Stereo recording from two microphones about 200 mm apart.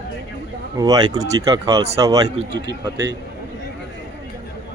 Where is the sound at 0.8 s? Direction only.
20° right (ahead or behind).